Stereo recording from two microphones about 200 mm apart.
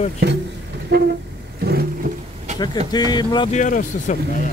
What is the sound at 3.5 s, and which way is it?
Speech, 40° left (ahead or behind).